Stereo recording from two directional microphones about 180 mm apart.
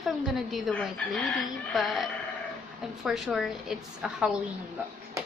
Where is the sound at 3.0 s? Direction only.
Centre (ahead or behind).